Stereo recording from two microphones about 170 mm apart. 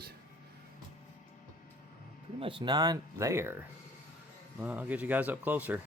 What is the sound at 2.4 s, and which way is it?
Speech, 30° right (ahead or behind).